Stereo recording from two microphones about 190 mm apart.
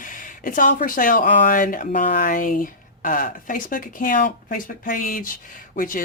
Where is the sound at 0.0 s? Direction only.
45° left (ahead or behind).